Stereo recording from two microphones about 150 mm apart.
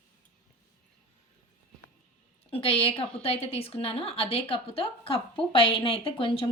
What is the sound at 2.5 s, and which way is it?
A woman's voice, 40° left (ahead or behind).